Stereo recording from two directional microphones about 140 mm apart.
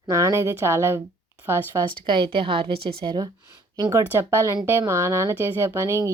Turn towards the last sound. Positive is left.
turn(degrees=-20)  # may be behind; listen again after turning